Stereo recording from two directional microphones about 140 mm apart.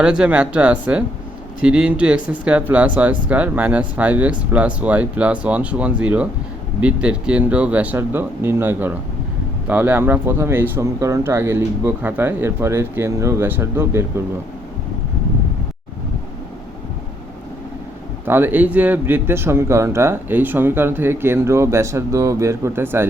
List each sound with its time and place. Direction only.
0.0 s speech: 5° right (ahead or behind)
18.3 s speech: 15° right (ahead or behind)